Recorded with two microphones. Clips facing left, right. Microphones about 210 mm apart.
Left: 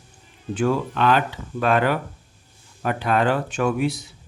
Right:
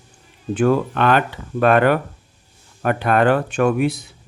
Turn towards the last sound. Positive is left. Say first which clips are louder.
# right 4 dB
turn(degrees=-55)  # may be behind; listen again after turning